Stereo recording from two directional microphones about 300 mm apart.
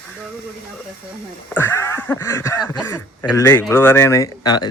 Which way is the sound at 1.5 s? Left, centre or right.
Centre.